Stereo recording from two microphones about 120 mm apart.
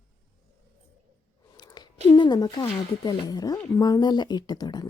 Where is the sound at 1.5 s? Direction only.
35° left (ahead or behind).